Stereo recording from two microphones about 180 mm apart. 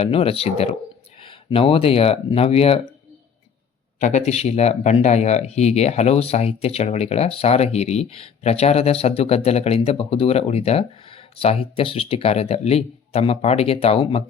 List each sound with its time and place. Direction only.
0.0 s speech: 30° left (ahead or behind)
4.0 s speech: 40° left (ahead or behind)